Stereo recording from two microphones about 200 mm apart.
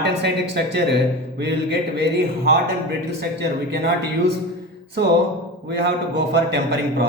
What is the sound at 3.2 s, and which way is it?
Speech, 55° right (ahead or behind).